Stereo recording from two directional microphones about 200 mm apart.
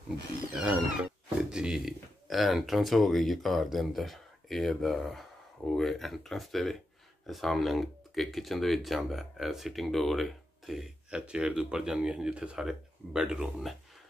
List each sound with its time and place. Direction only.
0.6 s speech: 5° right (ahead or behind)